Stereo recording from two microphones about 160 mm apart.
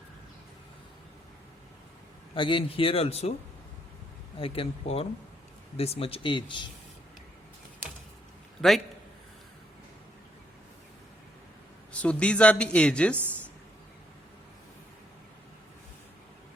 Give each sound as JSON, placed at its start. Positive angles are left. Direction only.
{"t": 2.3, "sound": "a man's voice", "side_deg": 30}
{"t": 4.4, "sound": "a man's voice", "side_deg": 35}
{"t": 11.9, "sound": "speech", "side_deg": 5}
{"t": 13.1, "sound": "speech", "side_deg": -10}